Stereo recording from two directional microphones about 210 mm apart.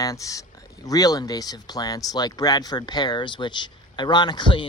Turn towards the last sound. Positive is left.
turn(degrees=20)  # may be behind; listen again after turning